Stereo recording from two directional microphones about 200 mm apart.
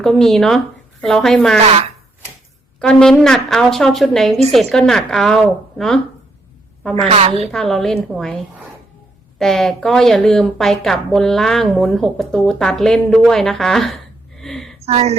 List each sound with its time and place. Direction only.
0.0 s a woman's voice: centre (ahead or behind)
1.6 s speech: 30° right (ahead or behind)
2.8 s a woman's voice: 5° left (ahead or behind)
6.9 s a woman's voice: 30° right (ahead or behind)
7.5 s a woman's voice: centre (ahead or behind)
14.8 s a woman's voice: 30° right (ahead or behind)